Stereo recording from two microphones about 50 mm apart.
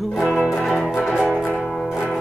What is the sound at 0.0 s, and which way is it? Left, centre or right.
Music, centre.